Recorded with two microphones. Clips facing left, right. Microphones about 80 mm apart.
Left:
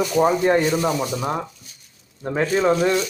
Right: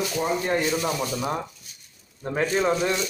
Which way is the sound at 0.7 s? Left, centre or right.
Left.